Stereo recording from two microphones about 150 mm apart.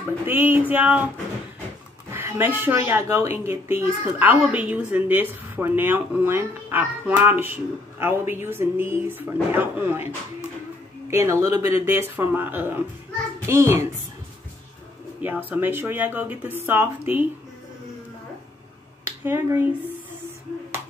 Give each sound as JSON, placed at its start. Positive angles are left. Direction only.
{"t": 0.3, "sound": "a woman's voice", "side_deg": -15}
{"t": 2.1, "sound": "a woman's voice", "side_deg": -15}
{"t": 15.2, "sound": "a woman's voice", "side_deg": -15}
{"t": 19.2, "sound": "a woman's voice", "side_deg": -15}